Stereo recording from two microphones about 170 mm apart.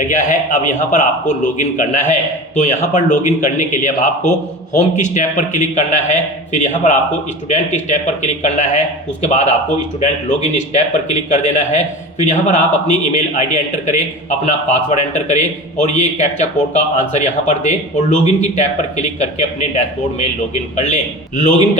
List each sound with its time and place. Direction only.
0.1 s a man's voice: 45° left (ahead or behind)